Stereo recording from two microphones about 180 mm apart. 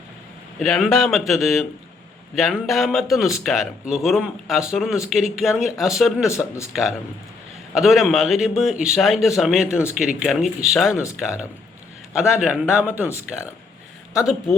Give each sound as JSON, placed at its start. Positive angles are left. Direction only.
{"t": 0.6, "sound": "speech", "side_deg": 0}
{"t": 6.2, "sound": "speech", "side_deg": 15}
{"t": 7.7, "sound": "speech", "side_deg": 0}
{"t": 12.1, "sound": "a man's voice", "side_deg": -5}